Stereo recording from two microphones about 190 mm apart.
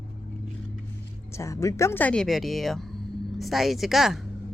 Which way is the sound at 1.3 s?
15° left (ahead or behind).